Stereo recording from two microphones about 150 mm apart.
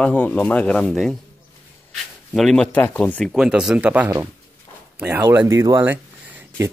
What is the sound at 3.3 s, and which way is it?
Speech, 5° right (ahead or behind).